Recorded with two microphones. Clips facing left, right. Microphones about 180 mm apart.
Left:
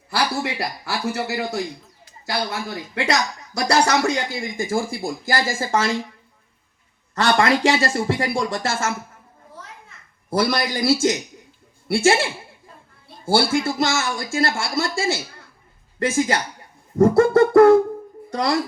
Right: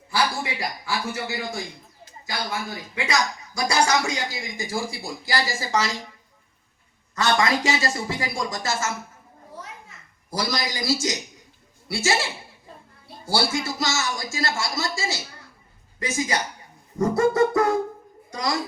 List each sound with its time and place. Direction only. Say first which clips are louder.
0.1 s a man's voice: left 2 dB; 70° left (ahead or behind); by 5.9 s 50° left (ahead or behind)
7.2 s speech: left 4 dB; 60° left (ahead or behind)
10.2 s speech: left 7 dB; 60° left (ahead or behind)